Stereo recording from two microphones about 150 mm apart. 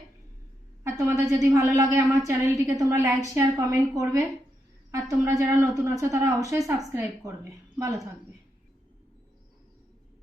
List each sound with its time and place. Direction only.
0.9 s a woman's voice: 20° right (ahead or behind)